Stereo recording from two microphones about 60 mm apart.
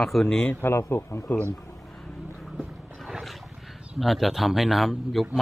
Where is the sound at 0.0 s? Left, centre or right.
Centre.